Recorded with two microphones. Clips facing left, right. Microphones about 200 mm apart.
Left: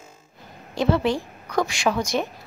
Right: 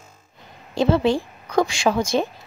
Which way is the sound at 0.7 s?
30° right (ahead or behind).